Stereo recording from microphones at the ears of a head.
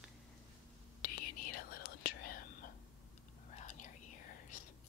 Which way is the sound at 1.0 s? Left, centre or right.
Left.